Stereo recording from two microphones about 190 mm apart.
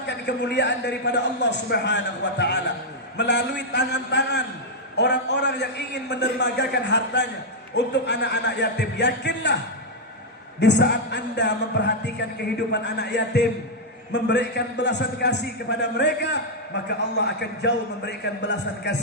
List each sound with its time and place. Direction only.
0.1 s a man's voice: 65° left (ahead or behind)
10.6 s a man's voice: 65° left (ahead or behind)